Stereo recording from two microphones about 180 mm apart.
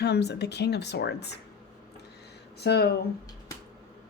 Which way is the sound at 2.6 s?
65° left (ahead or behind).